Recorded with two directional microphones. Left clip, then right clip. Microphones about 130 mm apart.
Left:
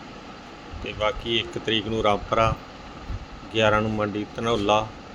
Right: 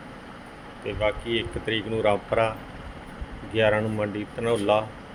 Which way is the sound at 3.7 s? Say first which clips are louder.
Left 2 dB; 20° left (ahead or behind).